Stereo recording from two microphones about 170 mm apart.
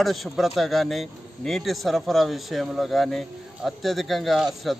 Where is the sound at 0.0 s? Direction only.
Centre (ahead or behind).